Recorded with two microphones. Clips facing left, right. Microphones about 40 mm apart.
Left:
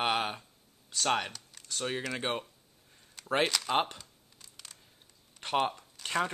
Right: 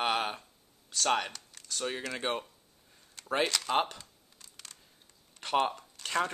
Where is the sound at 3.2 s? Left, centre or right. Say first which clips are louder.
Even; centre.